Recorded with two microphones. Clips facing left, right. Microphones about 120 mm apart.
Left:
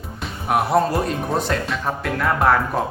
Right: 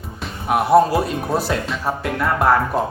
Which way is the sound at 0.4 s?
Centre (ahead or behind).